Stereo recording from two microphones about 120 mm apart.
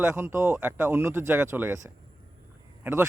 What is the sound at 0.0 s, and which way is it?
Speech, 20° right (ahead or behind).